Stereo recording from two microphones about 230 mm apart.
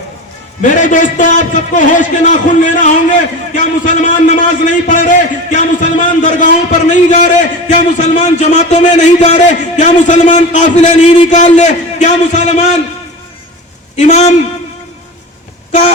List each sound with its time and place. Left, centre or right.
0.6 s a man's voice: left
14.0 s a man's voice: left